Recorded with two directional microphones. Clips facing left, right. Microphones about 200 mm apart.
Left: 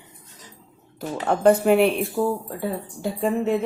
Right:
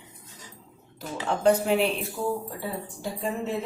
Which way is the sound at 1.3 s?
55° left (ahead or behind).